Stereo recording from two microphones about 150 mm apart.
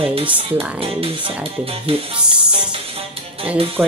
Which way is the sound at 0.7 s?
40° right (ahead or behind).